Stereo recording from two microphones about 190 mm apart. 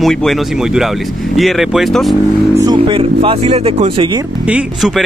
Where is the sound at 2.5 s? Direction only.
20° right (ahead or behind).